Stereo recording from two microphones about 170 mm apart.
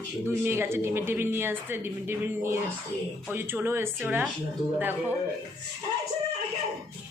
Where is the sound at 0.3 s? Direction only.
15° right (ahead or behind).